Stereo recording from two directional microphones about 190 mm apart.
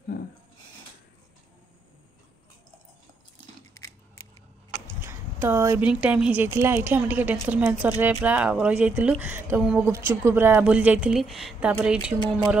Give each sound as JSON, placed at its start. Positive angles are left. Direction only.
{"t": 5.0, "sound": "speech", "side_deg": -15}